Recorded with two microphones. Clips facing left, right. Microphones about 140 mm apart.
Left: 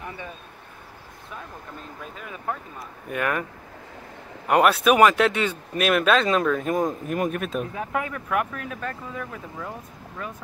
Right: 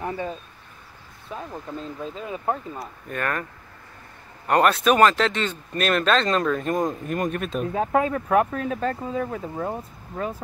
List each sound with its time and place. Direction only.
0.0 s a sound: 45° right (ahead or behind)
1.3 s speech: 30° right (ahead or behind)
3.1 s speech: 10° left (ahead or behind)
4.5 s speech: 5° left (ahead or behind)
7.7 s speech: 30° right (ahead or behind)